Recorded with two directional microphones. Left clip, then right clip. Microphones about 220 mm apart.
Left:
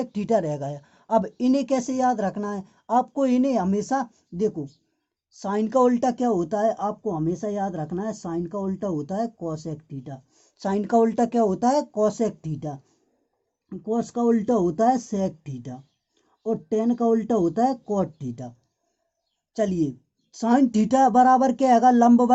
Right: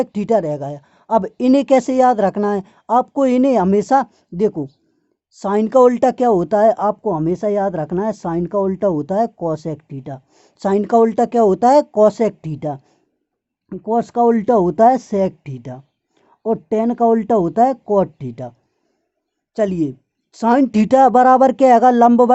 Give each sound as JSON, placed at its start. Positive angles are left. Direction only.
{"t": 0.0, "sound": "speech", "side_deg": -25}
{"t": 10.7, "sound": "speech", "side_deg": -25}
{"t": 19.5, "sound": "speech", "side_deg": -30}